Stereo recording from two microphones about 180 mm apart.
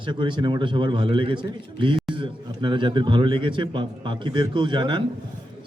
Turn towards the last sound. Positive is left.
turn(degrees=-25)  # may be behind; listen again after turning